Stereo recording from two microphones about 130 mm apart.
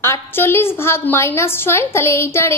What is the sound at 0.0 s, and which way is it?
A woman's voice, 20° left (ahead or behind).